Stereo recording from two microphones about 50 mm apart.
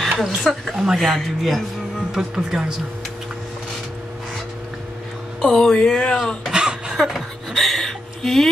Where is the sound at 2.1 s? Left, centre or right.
Centre.